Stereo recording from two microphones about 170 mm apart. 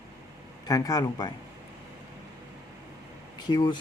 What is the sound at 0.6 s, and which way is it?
Speech, 20° left (ahead or behind).